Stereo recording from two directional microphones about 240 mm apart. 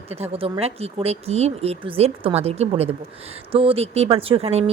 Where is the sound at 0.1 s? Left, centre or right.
Right.